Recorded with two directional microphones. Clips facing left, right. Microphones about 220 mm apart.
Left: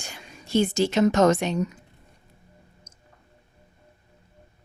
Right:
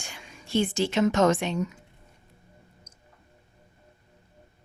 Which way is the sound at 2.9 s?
25° left (ahead or behind).